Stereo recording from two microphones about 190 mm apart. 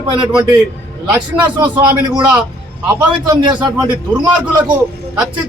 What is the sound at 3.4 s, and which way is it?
Speech, 20° right (ahead or behind).